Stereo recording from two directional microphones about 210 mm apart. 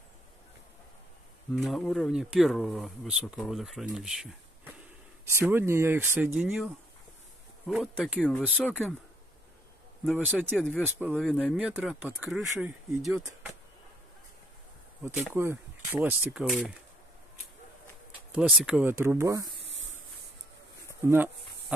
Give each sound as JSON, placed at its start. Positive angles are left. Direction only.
{"t": 1.5, "sound": "speech", "side_deg": 0}
{"t": 10.0, "sound": "speech", "side_deg": 5}
{"t": 10.8, "sound": "speech", "side_deg": -10}
{"t": 11.1, "sound": "speech", "side_deg": 0}
{"t": 15.3, "sound": "speech", "side_deg": -10}
{"t": 18.3, "sound": "speech", "side_deg": -5}
{"t": 19.5, "sound": "a sound", "side_deg": -60}
{"t": 21.0, "sound": "speech", "side_deg": -10}